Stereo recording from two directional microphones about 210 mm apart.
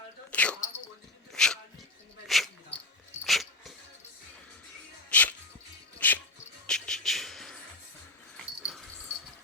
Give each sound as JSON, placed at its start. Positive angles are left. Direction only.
{"t": 0.3, "sound": "a sound", "side_deg": 5}
{"t": 1.3, "sound": "dog", "side_deg": 5}
{"t": 5.0, "sound": "music", "side_deg": 10}
{"t": 8.6, "sound": "dog", "side_deg": 0}